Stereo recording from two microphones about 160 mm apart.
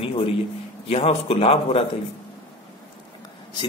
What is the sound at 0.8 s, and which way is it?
Speech, 40° left (ahead or behind).